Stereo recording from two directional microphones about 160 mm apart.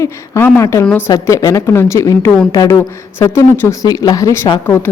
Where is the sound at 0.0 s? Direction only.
15° left (ahead or behind).